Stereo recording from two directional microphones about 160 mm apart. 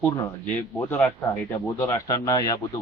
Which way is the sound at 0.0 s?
10° left (ahead or behind).